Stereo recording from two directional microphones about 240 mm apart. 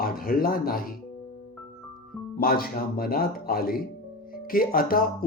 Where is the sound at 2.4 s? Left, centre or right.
Left.